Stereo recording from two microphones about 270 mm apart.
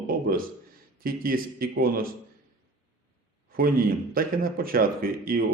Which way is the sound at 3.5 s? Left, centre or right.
Right.